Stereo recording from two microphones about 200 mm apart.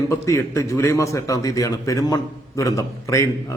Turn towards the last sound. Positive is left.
turn(degrees=15)  # may be behind; listen again after turning